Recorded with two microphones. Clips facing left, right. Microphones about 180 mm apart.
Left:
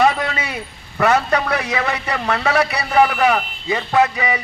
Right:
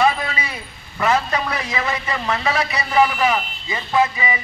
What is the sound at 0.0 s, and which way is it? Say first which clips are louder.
A man's voice: left 2 dB; 65° left (ahead or behind).